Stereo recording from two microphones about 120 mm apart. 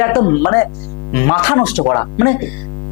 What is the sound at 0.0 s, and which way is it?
Speech, 25° left (ahead or behind).